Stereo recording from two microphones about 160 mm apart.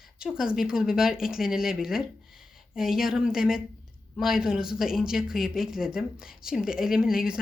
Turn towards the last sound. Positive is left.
turn(degrees=-5)  # may be behind; listen again after turning